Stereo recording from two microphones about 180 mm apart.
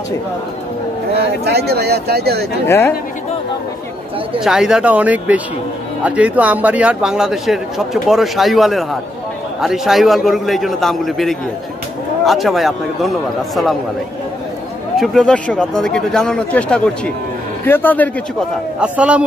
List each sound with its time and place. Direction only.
1.4 s speech: 65° right (ahead or behind)
2.6 s a man's voice: 15° left (ahead or behind)
4.4 s a man's voice: 5° right (ahead or behind)
15.0 s a man's voice: centre (ahead or behind)
18.8 s speech: 5° right (ahead or behind)